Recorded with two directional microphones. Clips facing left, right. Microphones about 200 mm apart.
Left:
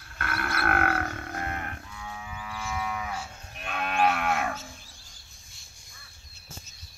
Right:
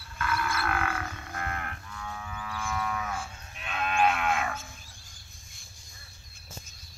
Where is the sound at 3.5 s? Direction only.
45° left (ahead or behind).